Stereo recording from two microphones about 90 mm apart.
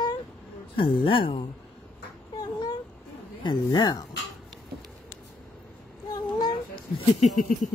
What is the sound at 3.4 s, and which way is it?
Speech, 55° left (ahead or behind).